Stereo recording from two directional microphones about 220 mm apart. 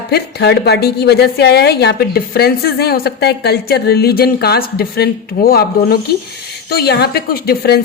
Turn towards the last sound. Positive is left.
turn(degrees=45)  # may be behind; listen again after turning